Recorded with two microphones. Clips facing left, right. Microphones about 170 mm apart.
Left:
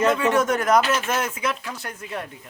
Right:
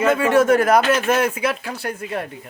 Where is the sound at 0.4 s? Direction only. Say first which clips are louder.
Right 5 dB; 60° right (ahead or behind).